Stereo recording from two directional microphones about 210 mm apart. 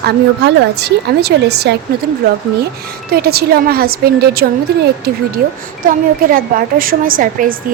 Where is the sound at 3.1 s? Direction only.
45° right (ahead or behind).